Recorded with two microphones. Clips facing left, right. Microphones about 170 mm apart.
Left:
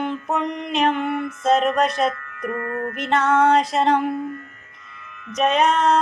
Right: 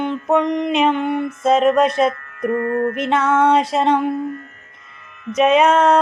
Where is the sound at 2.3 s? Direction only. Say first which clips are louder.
Right 7 dB; 30° right (ahead or behind).